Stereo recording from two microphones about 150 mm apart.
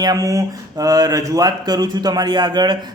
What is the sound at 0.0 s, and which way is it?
Speech, 25° right (ahead or behind).